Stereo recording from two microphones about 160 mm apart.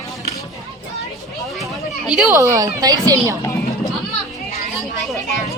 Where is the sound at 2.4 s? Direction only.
20° right (ahead or behind).